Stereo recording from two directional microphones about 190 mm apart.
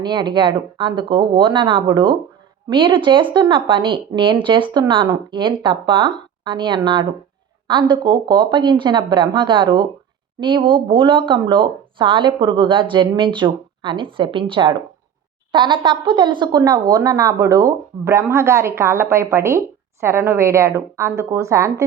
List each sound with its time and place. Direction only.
0.0 s speech: 25° right (ahead or behind)